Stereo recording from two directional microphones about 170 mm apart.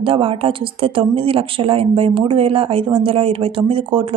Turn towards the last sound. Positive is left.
turn(degrees=-30)  # may be behind; listen again after turning